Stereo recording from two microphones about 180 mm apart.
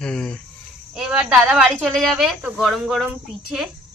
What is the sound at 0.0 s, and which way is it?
Speech, 5° left (ahead or behind).